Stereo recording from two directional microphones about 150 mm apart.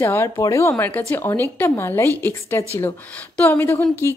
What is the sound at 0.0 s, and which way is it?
A woman's voice, 15° left (ahead or behind).